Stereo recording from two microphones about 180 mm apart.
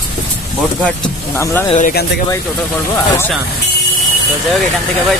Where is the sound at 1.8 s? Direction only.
50° left (ahead or behind).